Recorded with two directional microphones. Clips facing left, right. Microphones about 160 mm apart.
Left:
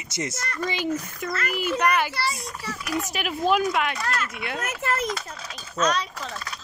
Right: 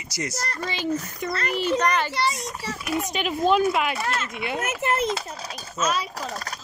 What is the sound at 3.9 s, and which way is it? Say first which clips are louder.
Speech: right 1 dB; 25° right (ahead or behind).